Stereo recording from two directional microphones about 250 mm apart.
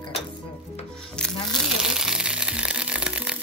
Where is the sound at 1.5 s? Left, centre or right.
Centre.